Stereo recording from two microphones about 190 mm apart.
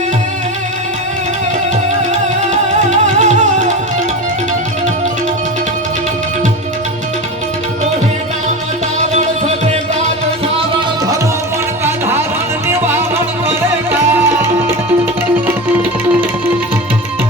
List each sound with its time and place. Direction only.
2.7 s music: 40° right (ahead or behind)
10.8 s music: 20° right (ahead or behind)